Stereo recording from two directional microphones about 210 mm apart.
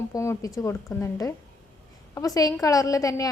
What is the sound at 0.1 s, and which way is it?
A woman's voice, 15° left (ahead or behind).